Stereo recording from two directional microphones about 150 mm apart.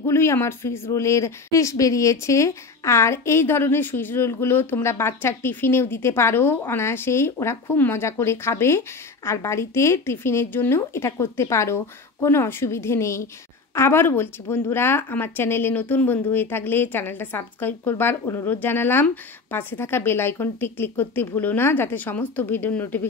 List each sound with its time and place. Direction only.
0.0 s speech: 15° left (ahead or behind)